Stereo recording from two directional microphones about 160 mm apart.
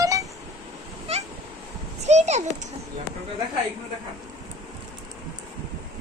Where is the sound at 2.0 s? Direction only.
45° right (ahead or behind).